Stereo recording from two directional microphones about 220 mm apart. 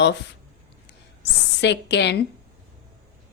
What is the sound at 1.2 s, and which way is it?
Speech, 50° left (ahead or behind).